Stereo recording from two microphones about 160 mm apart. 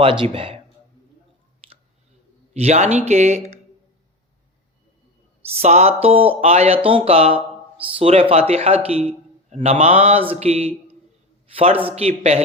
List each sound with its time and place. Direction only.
0.0 s speech: 35° right (ahead or behind)
2.5 s speech: 45° right (ahead or behind)
5.5 s speech: 40° right (ahead or behind)